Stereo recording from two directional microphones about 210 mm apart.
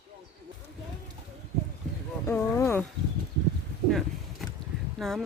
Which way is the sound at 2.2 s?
10° left (ahead or behind).